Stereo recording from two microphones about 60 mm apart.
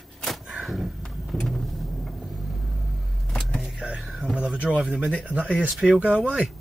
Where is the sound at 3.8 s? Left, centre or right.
Centre.